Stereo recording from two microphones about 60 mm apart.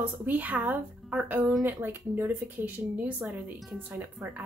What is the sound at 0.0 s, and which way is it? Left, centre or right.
A woman's voice, right.